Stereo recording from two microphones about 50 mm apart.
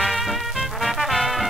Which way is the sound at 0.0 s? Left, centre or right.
Centre.